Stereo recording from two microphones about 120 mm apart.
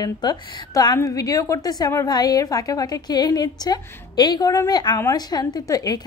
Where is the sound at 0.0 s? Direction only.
35° left (ahead or behind).